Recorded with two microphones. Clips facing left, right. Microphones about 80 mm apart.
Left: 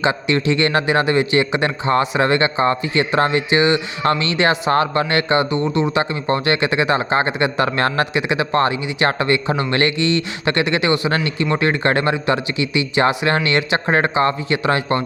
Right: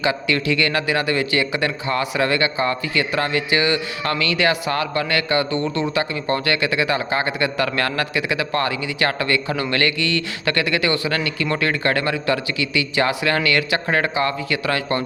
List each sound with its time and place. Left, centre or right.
0.0 s a man's voice: left